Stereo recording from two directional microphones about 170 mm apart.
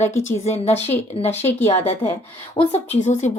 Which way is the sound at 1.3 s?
15° left (ahead or behind).